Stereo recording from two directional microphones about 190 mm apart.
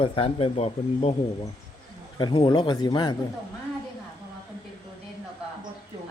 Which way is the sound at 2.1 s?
25° left (ahead or behind).